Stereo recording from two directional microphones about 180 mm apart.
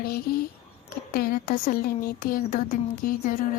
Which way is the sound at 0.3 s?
55° left (ahead or behind).